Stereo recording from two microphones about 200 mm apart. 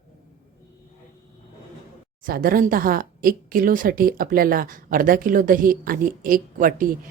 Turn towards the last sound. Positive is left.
turn(degrees=-45)  # may be behind; listen again after turning